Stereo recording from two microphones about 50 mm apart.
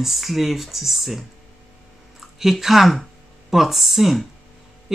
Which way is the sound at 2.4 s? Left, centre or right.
Centre.